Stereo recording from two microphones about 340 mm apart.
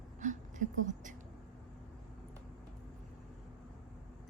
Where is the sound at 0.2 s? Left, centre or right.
Right.